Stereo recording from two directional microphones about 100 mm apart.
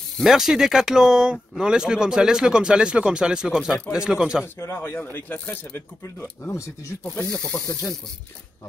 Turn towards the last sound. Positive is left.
turn(degrees=35)  # may be behind; listen again after turning